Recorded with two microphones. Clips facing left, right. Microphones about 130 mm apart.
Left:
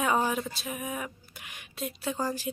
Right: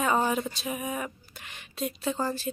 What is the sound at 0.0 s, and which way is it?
Speech, 5° left (ahead or behind).